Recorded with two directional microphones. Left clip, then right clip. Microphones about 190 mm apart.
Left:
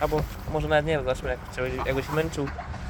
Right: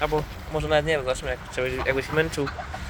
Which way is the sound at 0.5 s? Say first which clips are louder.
Right 1 dB; 10° left (ahead or behind).